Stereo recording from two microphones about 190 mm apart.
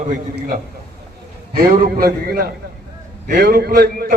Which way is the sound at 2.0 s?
55° right (ahead or behind).